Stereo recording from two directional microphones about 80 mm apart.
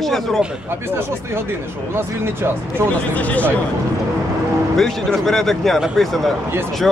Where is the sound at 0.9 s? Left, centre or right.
Right.